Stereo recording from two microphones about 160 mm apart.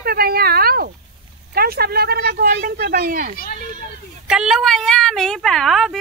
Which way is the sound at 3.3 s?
70° left (ahead or behind).